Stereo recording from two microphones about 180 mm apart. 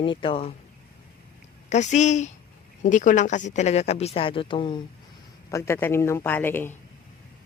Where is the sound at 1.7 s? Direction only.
40° left (ahead or behind).